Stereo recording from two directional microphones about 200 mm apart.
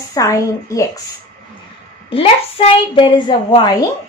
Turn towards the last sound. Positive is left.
turn(degrees=25)  # may be behind; listen again after turning